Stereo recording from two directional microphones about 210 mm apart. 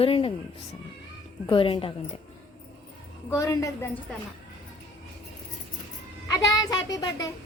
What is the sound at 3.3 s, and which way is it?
Child singing, 15° left (ahead or behind).